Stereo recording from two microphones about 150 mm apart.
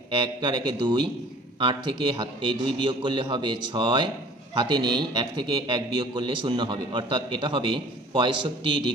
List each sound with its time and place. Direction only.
0.1 s a man's voice: 30° right (ahead or behind)